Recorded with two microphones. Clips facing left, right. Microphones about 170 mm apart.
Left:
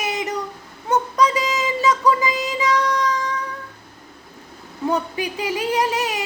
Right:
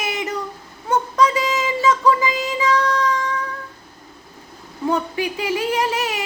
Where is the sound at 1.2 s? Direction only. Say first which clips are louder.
Right 3 dB; 15° left (ahead or behind).